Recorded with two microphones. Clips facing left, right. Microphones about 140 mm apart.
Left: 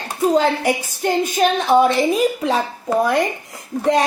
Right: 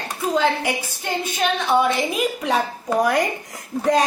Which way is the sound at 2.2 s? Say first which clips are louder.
Left 3 dB; 30° left (ahead or behind).